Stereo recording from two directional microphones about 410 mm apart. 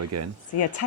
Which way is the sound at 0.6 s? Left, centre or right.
Left.